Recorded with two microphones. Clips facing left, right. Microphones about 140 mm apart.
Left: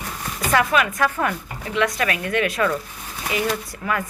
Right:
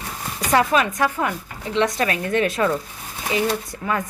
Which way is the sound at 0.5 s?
30° right (ahead or behind).